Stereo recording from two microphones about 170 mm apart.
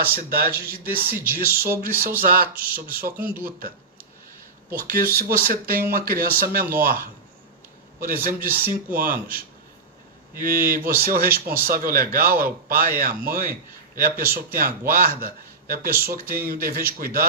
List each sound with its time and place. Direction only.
0.0 s speech: 60° right (ahead or behind)
3.2 s speech: 10° right (ahead or behind)
4.9 s speech: 60° right (ahead or behind)
8.0 s a man's voice: 55° right (ahead or behind)